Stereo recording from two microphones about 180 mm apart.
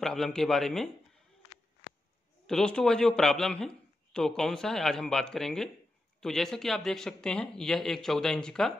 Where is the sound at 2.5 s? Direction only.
5° left (ahead or behind).